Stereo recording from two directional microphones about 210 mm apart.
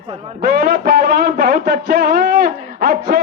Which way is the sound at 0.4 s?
45° right (ahead or behind).